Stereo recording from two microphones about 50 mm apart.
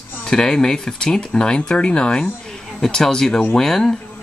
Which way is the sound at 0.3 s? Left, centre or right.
Centre.